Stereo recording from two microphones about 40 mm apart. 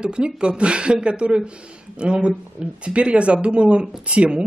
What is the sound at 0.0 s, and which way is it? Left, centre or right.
Speech, right.